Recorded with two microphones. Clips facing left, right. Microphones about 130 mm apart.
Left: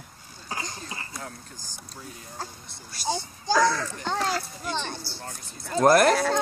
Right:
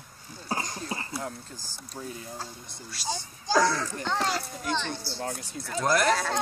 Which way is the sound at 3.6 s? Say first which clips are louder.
Left 2 dB; 25° right (ahead or behind).